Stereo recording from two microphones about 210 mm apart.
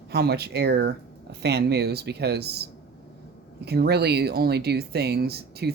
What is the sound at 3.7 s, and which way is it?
Speech, 50° right (ahead or behind).